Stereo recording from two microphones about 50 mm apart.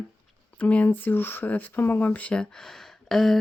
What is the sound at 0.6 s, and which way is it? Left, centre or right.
Speech, left.